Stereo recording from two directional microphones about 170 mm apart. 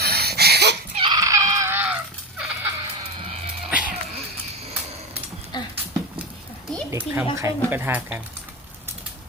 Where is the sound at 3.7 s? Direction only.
5° right (ahead or behind).